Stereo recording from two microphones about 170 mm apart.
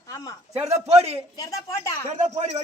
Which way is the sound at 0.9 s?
35° right (ahead or behind).